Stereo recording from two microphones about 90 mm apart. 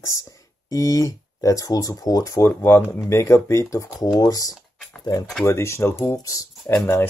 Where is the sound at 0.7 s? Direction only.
40° left (ahead or behind).